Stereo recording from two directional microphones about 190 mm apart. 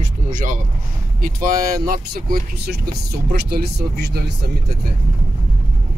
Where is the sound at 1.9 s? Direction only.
50° right (ahead or behind).